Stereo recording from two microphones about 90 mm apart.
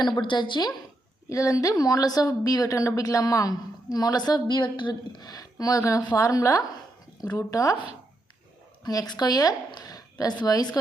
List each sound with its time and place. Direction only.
0.0 s a woman's voice: 55° left (ahead or behind)
1.3 s a woman's voice: 35° left (ahead or behind)
8.8 s a woman's voice: 45° left (ahead or behind)